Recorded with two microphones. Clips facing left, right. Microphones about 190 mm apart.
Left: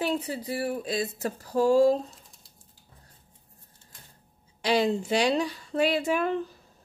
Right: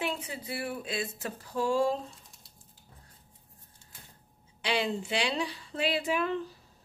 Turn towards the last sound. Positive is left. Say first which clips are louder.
# left 4 dB
turn(degrees=45)  # may be behind; listen again after turning